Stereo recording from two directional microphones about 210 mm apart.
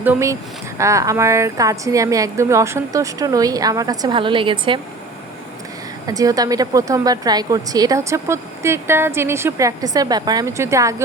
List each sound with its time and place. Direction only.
0.0 s a woman's voice: 10° right (ahead or behind)
6.1 s a woman's voice: 15° right (ahead or behind)